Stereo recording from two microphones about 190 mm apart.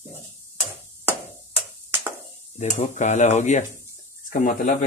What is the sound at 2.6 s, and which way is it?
Speech, 40° left (ahead or behind).